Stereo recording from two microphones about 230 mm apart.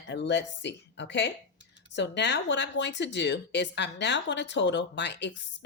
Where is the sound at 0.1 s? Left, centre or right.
Left.